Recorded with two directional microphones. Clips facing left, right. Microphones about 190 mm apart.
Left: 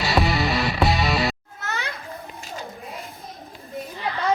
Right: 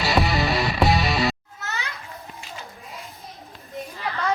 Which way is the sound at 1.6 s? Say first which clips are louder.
Left 2 dB; 55° left (ahead or behind).